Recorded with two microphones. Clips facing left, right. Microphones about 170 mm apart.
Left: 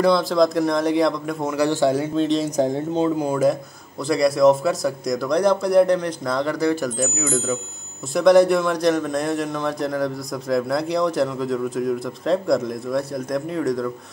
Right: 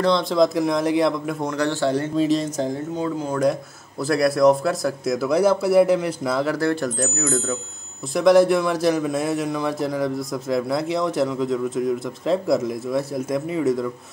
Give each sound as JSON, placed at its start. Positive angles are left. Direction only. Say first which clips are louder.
{"t": 0.0, "sound": "a man's voice", "louder": "left 1 dB", "side_deg": 5}
{"t": 2.1, "sound": "a man's voice", "louder": "even", "side_deg": 0}
{"t": 2.5, "sound": "speech", "louder": "left 4 dB", "side_deg": 20}
{"t": 3.3, "sound": "a man's voice", "louder": "left 2 dB", "side_deg": 5}
{"t": 7.2, "sound": "speech", "louder": "even", "side_deg": 15}
{"t": 8.1, "sound": "a man's voice", "louder": "left 1 dB", "side_deg": 0}